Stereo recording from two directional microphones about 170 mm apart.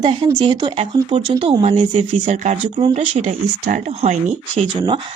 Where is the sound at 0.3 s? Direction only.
30° right (ahead or behind).